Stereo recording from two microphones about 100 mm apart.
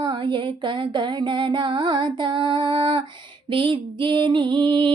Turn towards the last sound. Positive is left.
turn(degrees=-50)  # may be behind; listen again after turning